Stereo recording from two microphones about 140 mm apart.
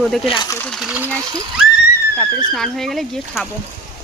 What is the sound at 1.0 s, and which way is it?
Speech, 20° right (ahead or behind).